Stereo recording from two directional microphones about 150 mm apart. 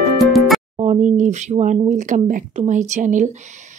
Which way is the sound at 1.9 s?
55° right (ahead or behind).